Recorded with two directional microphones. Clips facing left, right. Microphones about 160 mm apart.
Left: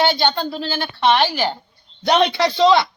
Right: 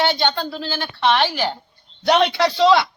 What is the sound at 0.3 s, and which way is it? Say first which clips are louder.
Speech: left 2 dB; 30° left (ahead or behind).